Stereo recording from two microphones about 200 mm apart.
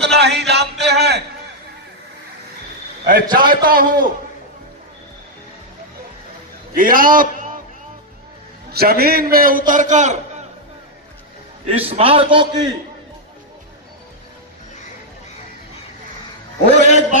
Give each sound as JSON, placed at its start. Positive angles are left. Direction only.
{"t": 0.0, "sound": "a sound", "side_deg": -60}
{"t": 3.3, "sound": "a man's voice", "side_deg": -45}
{"t": 6.7, "sound": "a man's voice", "side_deg": -45}
{"t": 8.7, "sound": "a man's voice", "side_deg": -50}
{"t": 11.6, "sound": "a man's voice", "side_deg": -30}
{"t": 16.8, "sound": "a sound", "side_deg": 35}